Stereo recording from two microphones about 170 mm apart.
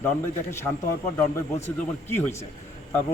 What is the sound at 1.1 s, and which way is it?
A man's voice, 15° left (ahead or behind).